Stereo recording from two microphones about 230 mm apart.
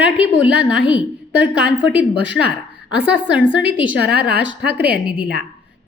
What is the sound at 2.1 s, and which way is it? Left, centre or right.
Speech, right.